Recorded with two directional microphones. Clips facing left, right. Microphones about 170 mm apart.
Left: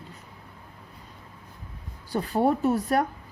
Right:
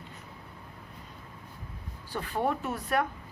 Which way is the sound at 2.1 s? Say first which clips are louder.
Left 7 dB; 40° left (ahead or behind).